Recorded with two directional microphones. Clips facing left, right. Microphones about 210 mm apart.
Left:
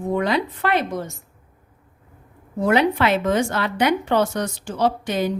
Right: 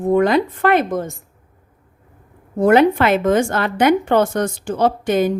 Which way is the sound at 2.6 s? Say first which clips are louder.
Right 6 dB; 50° right (ahead or behind).